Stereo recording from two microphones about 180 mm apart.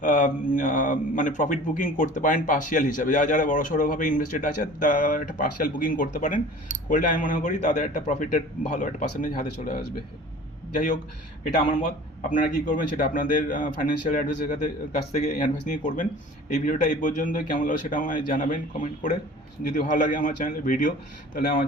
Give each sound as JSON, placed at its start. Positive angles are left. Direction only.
{"t": 0.0, "sound": "speech", "side_deg": 45}